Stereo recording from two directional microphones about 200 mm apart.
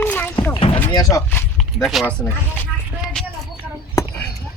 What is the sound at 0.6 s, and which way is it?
Speech, 25° left (ahead or behind).